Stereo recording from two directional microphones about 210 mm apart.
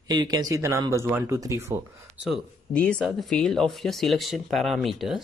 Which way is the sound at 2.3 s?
5° left (ahead or behind).